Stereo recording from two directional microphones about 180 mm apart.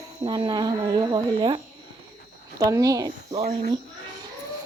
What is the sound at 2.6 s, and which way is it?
Speech, 20° right (ahead or behind).